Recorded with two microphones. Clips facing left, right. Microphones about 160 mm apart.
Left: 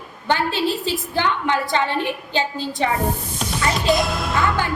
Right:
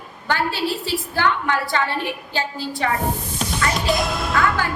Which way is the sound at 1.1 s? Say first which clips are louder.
Even; 20° left (ahead or behind).